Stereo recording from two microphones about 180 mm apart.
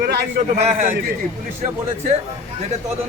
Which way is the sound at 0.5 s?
35° right (ahead or behind).